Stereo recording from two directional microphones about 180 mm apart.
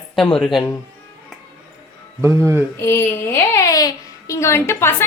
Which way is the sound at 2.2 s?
15° right (ahead or behind).